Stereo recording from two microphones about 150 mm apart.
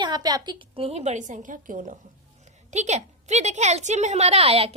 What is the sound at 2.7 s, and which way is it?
A woman's voice, 50° right (ahead or behind).